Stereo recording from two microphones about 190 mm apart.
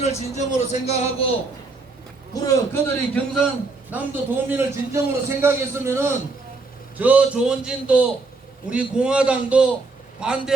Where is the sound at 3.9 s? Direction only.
10° right (ahead or behind).